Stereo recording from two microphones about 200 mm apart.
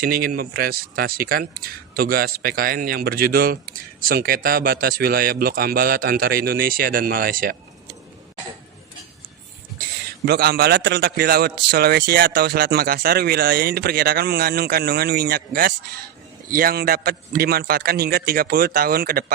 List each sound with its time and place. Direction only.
0.0 s speech: 50° right (ahead or behind)
10.2 s speech: 50° right (ahead or behind)